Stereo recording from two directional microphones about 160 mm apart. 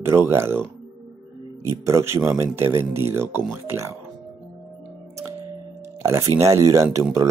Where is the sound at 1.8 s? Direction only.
15° right (ahead or behind).